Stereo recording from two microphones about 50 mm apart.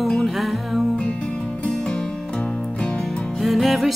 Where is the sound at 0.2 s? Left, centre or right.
Centre.